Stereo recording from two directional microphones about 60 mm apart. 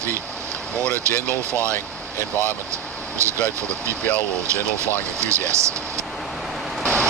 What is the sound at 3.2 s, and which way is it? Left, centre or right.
Speech, right.